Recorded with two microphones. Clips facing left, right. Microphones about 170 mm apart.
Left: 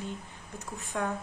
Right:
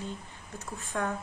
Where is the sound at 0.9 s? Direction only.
15° left (ahead or behind).